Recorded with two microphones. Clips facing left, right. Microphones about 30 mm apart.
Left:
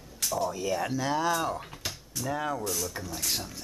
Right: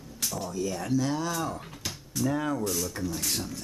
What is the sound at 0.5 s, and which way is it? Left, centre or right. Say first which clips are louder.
Speech: even; centre.